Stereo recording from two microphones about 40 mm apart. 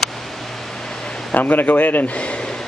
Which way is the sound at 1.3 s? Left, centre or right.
Left.